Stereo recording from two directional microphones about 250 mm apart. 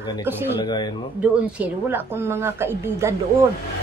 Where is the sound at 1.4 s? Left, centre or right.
Centre.